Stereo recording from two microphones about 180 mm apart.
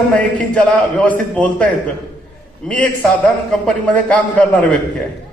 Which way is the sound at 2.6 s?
5° left (ahead or behind).